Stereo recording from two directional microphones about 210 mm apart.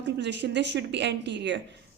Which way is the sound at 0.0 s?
55° right (ahead or behind).